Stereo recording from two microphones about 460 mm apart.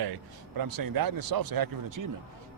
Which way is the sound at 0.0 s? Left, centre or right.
Right.